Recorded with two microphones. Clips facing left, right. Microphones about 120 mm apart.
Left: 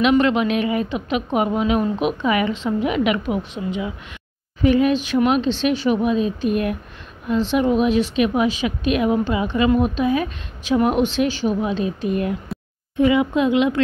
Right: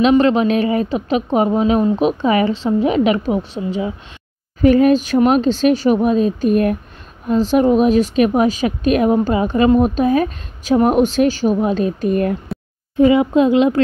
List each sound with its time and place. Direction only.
0.0 s a woman's voice: 35° right (ahead or behind)
4.6 s a woman's voice: 45° right (ahead or behind)
12.9 s a woman's voice: 35° right (ahead or behind)